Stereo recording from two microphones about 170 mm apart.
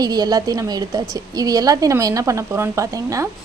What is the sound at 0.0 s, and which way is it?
A woman's voice, 25° right (ahead or behind).